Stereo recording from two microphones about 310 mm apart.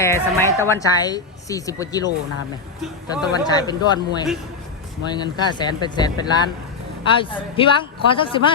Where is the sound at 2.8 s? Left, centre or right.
Centre.